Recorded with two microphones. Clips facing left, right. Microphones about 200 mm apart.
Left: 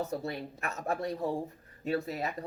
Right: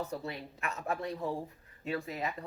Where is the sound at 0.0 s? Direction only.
45° left (ahead or behind).